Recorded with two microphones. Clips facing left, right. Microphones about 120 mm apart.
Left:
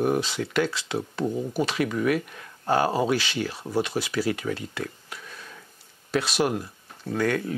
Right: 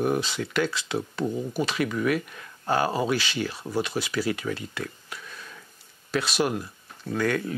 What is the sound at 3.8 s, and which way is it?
Speech, 50° left (ahead or behind).